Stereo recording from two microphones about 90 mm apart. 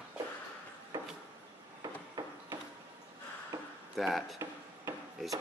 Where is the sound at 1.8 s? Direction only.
45° right (ahead or behind).